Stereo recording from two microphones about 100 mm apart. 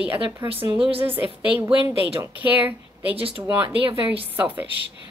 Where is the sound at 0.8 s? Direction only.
70° right (ahead or behind).